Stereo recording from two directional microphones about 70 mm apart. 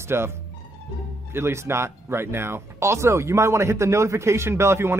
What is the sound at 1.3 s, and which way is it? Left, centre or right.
Speech, right.